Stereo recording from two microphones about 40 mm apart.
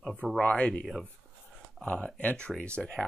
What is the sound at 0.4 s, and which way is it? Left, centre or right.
Speech, left.